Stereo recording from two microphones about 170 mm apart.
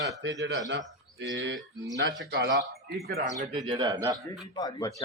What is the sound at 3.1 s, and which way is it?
Speech, 45° right (ahead or behind).